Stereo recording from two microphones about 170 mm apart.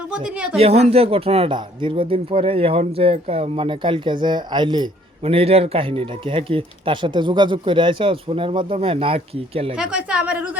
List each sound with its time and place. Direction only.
0.1 s speech: 5° right (ahead or behind)
0.6 s speech: 35° right (ahead or behind)
9.7 s a woman's voice: 5° right (ahead or behind)